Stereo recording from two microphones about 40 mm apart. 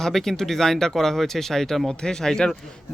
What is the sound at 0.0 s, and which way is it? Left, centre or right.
Speech, centre.